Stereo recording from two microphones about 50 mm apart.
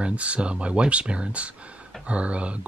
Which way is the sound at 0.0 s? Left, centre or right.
Right.